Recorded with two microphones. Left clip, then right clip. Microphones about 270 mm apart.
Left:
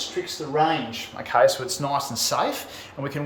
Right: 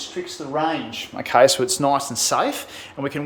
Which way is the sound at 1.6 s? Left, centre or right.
Centre.